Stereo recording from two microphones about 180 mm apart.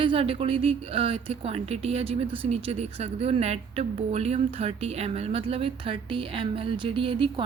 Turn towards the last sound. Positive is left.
turn(degrees=-30)  # may be behind; listen again after turning